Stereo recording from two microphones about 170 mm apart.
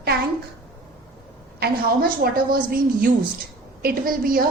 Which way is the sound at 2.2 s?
60° right (ahead or behind).